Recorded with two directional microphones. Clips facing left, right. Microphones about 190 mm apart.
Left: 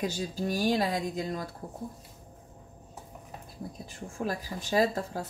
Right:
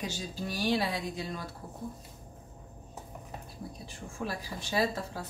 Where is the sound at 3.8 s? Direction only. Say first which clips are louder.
Left 4 dB; 45° left (ahead or behind).